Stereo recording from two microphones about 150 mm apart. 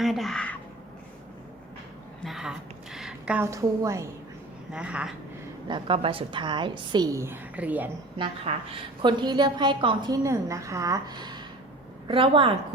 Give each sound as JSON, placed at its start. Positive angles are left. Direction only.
{"t": 0.0, "sound": "speech", "side_deg": 0}
{"t": 2.2, "sound": "a sound", "side_deg": -5}
{"t": 3.4, "sound": "a woman's voice", "side_deg": -20}
{"t": 4.7, "sound": "speech", "side_deg": -10}
{"t": 5.6, "sound": "a woman's voice", "side_deg": -35}
{"t": 8.5, "sound": "a woman's voice", "side_deg": -45}
{"t": 9.0, "sound": "a woman's voice", "side_deg": -30}